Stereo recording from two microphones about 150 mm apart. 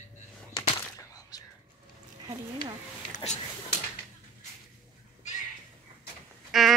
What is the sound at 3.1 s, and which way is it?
Speech, 50° left (ahead or behind).